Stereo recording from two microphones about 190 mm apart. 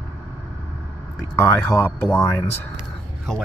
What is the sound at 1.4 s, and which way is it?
Speech, 10° left (ahead or behind).